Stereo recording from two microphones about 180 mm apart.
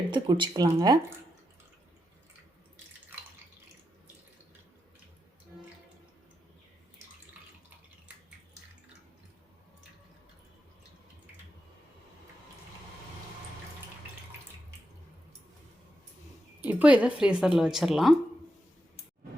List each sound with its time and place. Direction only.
0.1 s speech: 25° right (ahead or behind)
16.6 s speech: 10° right (ahead or behind)